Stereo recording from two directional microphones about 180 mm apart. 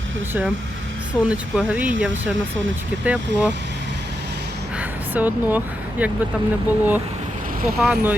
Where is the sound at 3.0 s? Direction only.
10° right (ahead or behind).